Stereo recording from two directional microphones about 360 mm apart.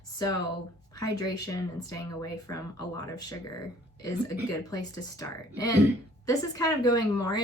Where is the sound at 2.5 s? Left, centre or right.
Left.